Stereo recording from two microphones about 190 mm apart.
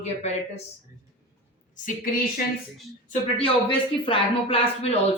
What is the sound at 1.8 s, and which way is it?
Speech, 50° left (ahead or behind).